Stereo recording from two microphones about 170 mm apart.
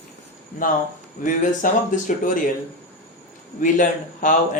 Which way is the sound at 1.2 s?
50° left (ahead or behind).